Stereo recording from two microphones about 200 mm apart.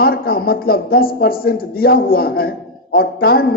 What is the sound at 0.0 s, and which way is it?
A man's voice, 50° left (ahead or behind).